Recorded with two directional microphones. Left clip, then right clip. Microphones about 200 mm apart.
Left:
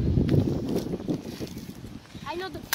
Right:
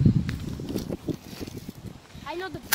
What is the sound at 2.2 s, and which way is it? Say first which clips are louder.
Vehicle: even; 5° right (ahead or behind).